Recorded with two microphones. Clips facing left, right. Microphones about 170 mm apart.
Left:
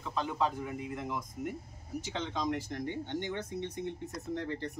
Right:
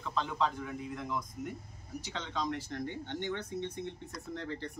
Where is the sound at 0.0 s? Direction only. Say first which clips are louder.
Left 1 dB; 10° left (ahead or behind).